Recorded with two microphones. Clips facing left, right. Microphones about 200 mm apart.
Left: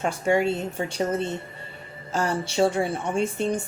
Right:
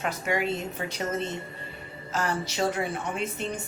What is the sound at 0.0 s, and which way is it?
A woman's voice, 30° left (ahead or behind).